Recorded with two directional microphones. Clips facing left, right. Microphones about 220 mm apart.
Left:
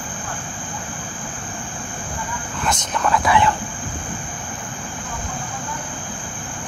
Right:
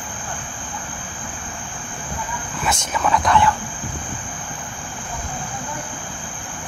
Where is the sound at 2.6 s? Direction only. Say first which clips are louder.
Even; 5° right (ahead or behind).